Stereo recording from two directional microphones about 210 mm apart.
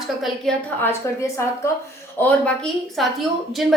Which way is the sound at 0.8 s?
10° left (ahead or behind).